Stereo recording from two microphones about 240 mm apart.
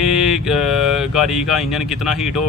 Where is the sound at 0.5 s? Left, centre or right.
Centre.